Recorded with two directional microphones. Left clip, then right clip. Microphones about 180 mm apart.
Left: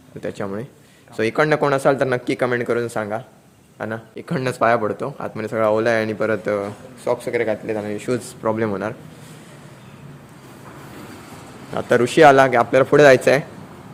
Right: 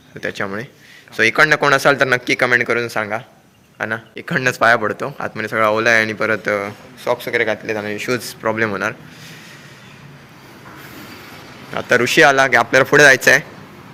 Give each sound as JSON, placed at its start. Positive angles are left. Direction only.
{"t": 0.2, "sound": "speech", "side_deg": 5}
{"t": 11.7, "sound": "speech", "side_deg": 20}